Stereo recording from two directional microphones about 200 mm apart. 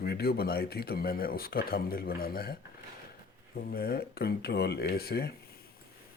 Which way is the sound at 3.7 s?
50° left (ahead or behind).